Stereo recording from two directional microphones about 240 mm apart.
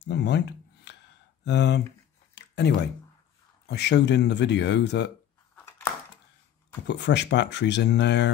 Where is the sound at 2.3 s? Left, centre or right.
Left.